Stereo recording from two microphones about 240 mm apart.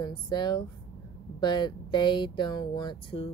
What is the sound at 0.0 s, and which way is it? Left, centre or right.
Speech, centre.